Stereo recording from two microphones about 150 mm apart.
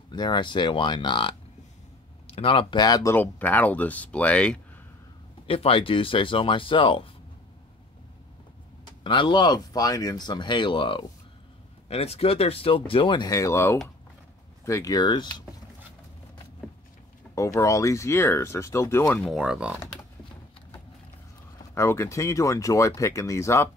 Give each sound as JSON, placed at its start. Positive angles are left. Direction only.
{"t": 0.1, "sound": "speech", "side_deg": 30}
{"t": 3.2, "sound": "speech", "side_deg": 10}
{"t": 5.5, "sound": "speech", "side_deg": 35}
{"t": 9.0, "sound": "speech", "side_deg": 35}
{"t": 17.4, "sound": "speech", "side_deg": 20}
{"t": 19.2, "sound": "speech", "side_deg": -5}
{"t": 21.7, "sound": "speech", "side_deg": 20}